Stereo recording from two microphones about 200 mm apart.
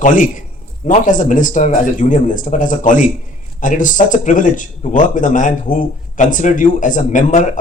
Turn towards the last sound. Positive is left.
turn(degrees=40)  # may be behind; listen again after turning